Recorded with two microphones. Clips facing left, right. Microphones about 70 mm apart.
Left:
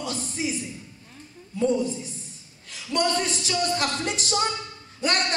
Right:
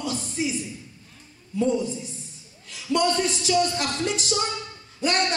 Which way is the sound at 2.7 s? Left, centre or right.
Left.